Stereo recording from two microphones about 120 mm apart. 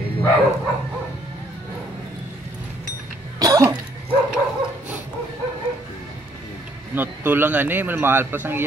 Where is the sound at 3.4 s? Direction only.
30° right (ahead or behind).